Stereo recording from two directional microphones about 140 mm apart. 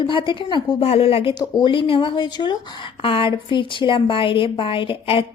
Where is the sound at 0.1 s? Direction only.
35° left (ahead or behind).